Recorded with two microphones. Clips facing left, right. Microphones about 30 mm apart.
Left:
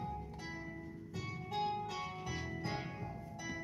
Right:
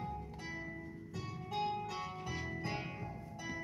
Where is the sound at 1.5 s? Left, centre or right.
Centre.